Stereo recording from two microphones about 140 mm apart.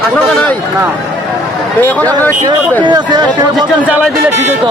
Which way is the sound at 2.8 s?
30° right (ahead or behind).